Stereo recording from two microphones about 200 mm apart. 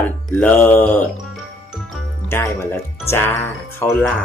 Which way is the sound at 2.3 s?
15° left (ahead or behind).